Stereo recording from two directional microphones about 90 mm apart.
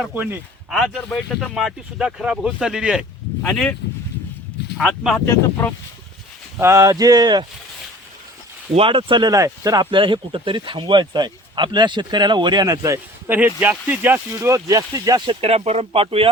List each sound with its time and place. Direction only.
0.0 s speech: 20° right (ahead or behind)
0.7 s speech: 5° left (ahead or behind)
3.4 s speech: 10° left (ahead or behind)
5.2 s speech: 30° left (ahead or behind)
6.6 s speech: 30° right (ahead or behind); by 7.4 s 50° right (ahead or behind)
8.8 s speech: 70° right (ahead or behind)
9.3 s speech: 40° right (ahead or behind)
9.9 s speech: 65° right (ahead or behind); by 13.0 s 40° right (ahead or behind)
13.2 s speech: 20° right (ahead or behind)
14.5 s speech: 40° right (ahead or behind)
15.3 s speech: 90° right